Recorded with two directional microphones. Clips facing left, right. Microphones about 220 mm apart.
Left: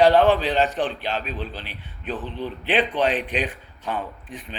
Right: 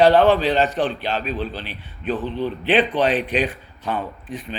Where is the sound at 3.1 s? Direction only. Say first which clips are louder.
Right 3 dB; 40° right (ahead or behind).